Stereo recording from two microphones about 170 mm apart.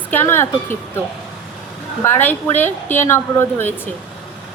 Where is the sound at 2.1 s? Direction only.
10° left (ahead or behind).